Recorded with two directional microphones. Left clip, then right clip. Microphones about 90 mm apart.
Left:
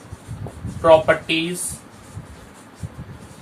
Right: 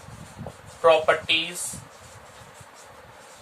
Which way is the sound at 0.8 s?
35° right (ahead or behind).